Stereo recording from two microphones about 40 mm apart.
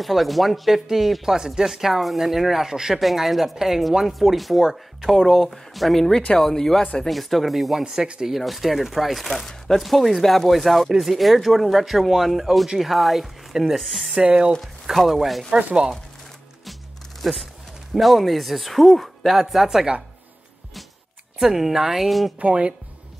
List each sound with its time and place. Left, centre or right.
0.0 s speech: centre
1.3 s speech: centre
3.0 s speech: centre
7.1 s speech: centre
14.2 s chopping: right
14.6 s speech: centre
15.5 s chopping: right
17.2 s speech: centre
21.4 s speech: centre
22.4 s chopping: right